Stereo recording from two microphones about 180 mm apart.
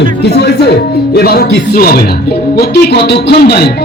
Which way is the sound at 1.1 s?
60° left (ahead or behind).